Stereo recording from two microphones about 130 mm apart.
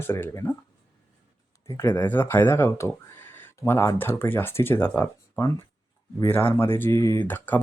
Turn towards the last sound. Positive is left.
turn(degrees=15)  # may be behind; listen again after turning